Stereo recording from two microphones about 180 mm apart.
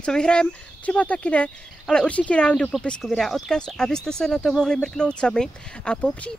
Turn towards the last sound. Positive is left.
turn(degrees=5)  # may be behind; listen again after turning